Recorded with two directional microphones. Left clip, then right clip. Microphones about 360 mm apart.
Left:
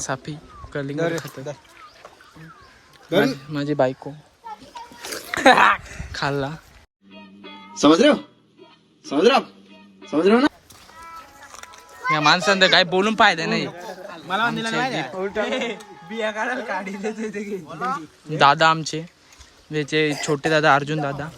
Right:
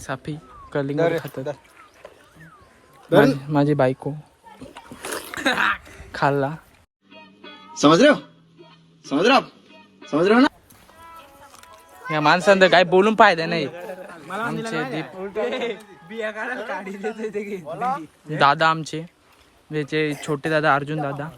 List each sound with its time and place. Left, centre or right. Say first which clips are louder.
0.0 s speech: left 2 dB; centre
3.2 s a man's voice: right 4 dB; centre
5.3 s speech: left 7 dB; left
6.1 s a man's voice: right 4 dB; centre
7.1 s music: left 1 dB; centre
9.0 s a man's voice: even; centre
11.7 s speech: left 4 dB; centre
14.3 s speech: left 5 dB; left
15.4 s a man's voice: even; centre
17.5 s a man's voice: right 1 dB; centre
18.3 s a man's voice: left 2 dB; centre